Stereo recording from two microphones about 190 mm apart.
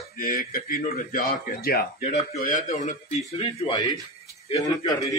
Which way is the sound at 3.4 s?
30° left (ahead or behind).